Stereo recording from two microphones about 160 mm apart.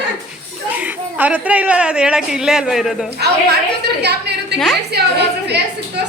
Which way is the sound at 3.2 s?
90° right.